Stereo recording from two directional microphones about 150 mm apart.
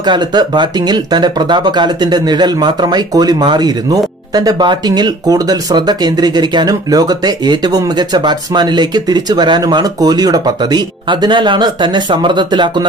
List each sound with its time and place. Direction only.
0.0 s speech: 30° right (ahead or behind)